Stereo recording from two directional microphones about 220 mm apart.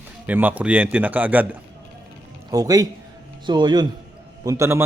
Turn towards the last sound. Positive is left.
turn(degrees=-10)  # may be behind; listen again after turning